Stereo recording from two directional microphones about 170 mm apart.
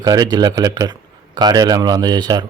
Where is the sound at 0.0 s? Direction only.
20° right (ahead or behind).